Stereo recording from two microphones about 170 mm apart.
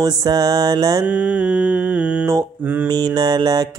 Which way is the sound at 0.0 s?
20° right (ahead or behind).